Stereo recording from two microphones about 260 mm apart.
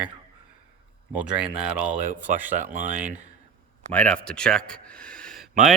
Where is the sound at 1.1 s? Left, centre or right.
Centre.